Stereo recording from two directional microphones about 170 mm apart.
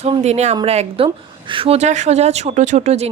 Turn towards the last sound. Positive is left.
turn(degrees=-40)  # may be behind; listen again after turning